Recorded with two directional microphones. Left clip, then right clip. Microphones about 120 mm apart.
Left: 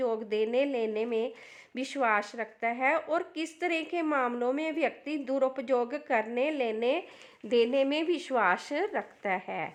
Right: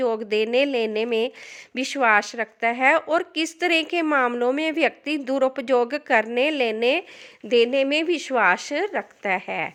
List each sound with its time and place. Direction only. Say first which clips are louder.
0.0 s a woman's voice: right 7 dB; 35° right (ahead or behind)
7.4 s speech: right 7 dB; 20° right (ahead or behind)